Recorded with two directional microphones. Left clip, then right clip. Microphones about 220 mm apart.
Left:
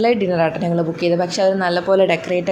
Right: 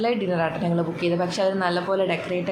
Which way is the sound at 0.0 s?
25° left (ahead or behind).